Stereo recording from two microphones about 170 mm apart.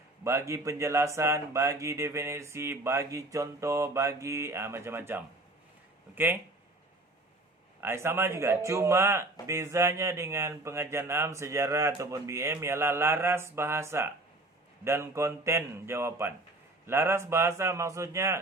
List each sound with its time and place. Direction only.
0.3 s speech: 15° right (ahead or behind)
7.8 s speech: 15° right (ahead or behind)